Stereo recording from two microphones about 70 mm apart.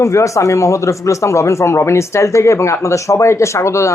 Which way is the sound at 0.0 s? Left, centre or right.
Left.